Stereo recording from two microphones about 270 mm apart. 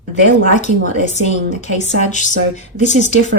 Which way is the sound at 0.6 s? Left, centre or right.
Left.